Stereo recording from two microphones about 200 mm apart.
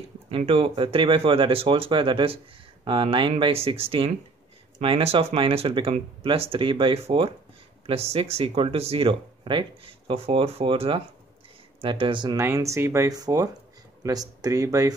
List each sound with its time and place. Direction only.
0.3 s speech: 30° right (ahead or behind)